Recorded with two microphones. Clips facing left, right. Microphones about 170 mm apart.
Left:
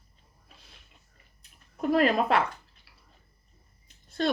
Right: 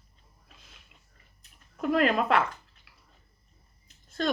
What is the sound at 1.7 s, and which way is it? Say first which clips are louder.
Speech: left 1 dB; 35° left (ahead or behind).